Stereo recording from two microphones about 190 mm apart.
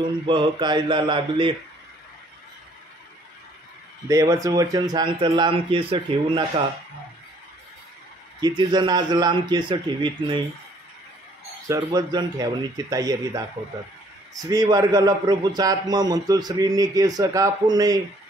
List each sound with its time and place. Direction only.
0.0 s a man's voice: 25° right (ahead or behind)
4.1 s a man's voice: 20° right (ahead or behind)
8.4 s a man's voice: 20° right (ahead or behind)
11.6 s a man's voice: 20° right (ahead or behind)
14.4 s a man's voice: 20° right (ahead or behind)